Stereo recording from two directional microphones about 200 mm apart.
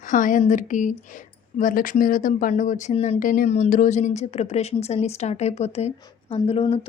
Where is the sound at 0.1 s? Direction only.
40° left (ahead or behind).